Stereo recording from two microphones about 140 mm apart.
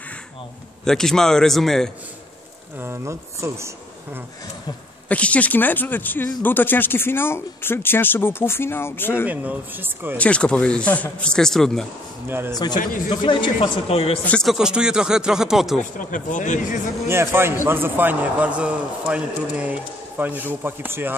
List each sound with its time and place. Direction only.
0.8 s speech: 5° left (ahead or behind)
2.8 s speech: 20° right (ahead or behind)
5.0 s speech: 10° left (ahead or behind)
9.2 s a man's voice: 10° right (ahead or behind)
10.1 s speech: 10° left (ahead or behind)
12.3 s a man's voice: 15° right (ahead or behind)
12.7 s speech: 75° left (ahead or behind)
13.1 s a man's voice: 35° left (ahead or behind)
14.2 s speech: 10° left (ahead or behind)
14.5 s speech: 5° right (ahead or behind)
15.8 s speech: 65° left (ahead or behind)
17.1 s a man's voice: 15° right (ahead or behind)